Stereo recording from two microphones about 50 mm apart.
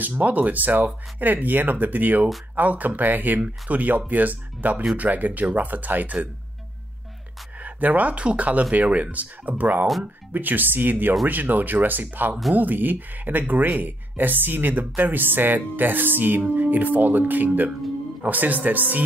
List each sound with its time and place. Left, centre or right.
0.0 s speech: right
7.5 s speech: right